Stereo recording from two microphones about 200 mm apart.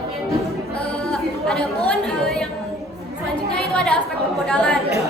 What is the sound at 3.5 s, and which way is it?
Chatter, 5° left (ahead or behind).